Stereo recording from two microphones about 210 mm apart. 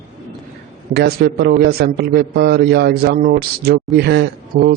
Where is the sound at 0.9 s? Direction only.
50° right (ahead or behind).